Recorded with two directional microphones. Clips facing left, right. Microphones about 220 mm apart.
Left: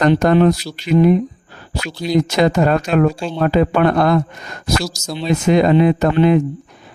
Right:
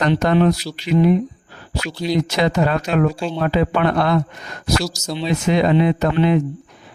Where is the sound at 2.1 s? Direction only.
45° left (ahead or behind).